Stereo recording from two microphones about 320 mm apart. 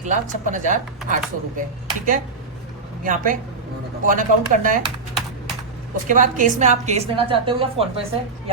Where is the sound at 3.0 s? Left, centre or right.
Right.